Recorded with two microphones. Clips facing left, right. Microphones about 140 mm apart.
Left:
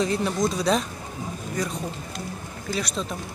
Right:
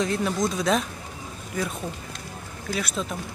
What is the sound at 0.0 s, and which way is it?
Speech, centre (ahead or behind).